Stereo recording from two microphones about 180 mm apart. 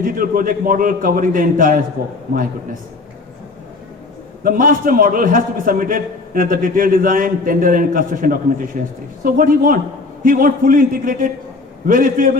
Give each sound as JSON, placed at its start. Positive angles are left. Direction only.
{"t": 0.0, "sound": "a man's voice", "side_deg": -50}
{"t": 4.4, "sound": "a man's voice", "side_deg": -50}